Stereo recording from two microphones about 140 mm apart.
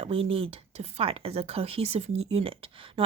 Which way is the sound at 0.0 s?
40° right (ahead or behind).